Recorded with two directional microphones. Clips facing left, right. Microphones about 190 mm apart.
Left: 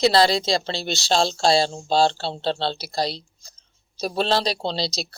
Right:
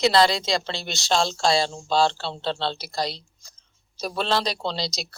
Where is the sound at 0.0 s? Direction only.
35° left (ahead or behind).